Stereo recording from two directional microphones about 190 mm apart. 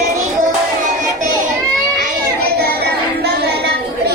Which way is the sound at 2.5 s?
55° right (ahead or behind).